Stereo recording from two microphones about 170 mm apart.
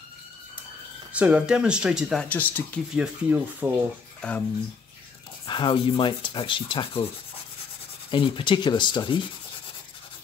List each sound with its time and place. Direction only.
1.1 s speech: 10° right (ahead or behind); by 2.8 s 10° left (ahead or behind)
2.9 s speech: 10° right (ahead or behind)
4.2 s speech: 5° left (ahead or behind)
5.5 s speech: 30° left (ahead or behind)
8.1 s speech: 30° left (ahead or behind)